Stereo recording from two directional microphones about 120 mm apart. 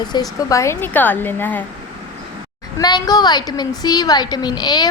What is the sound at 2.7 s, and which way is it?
A woman's voice, 35° left (ahead or behind).